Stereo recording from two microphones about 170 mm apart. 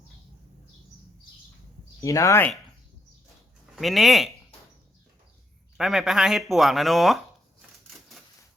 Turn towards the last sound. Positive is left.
turn(degrees=0)  # may be behind; listen again after turning